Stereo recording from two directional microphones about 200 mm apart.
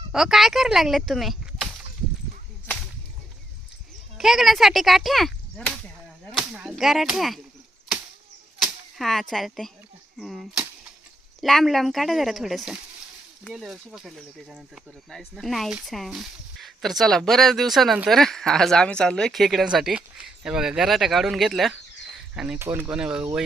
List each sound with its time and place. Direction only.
0.1 s speech: centre (ahead or behind)
4.2 s speech: centre (ahead or behind)
6.3 s whip: 5° right (ahead or behind)
8.6 s speech: centre (ahead or behind)